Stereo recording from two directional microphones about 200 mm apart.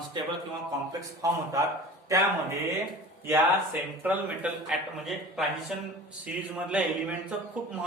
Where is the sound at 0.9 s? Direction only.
15° right (ahead or behind).